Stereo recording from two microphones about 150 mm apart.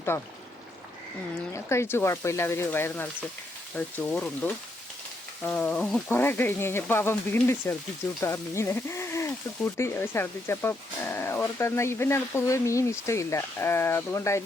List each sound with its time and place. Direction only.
1.5 s speech: 20° left (ahead or behind)